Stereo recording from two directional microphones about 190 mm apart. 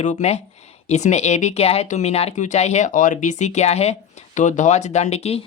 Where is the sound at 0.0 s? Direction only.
40° left (ahead or behind).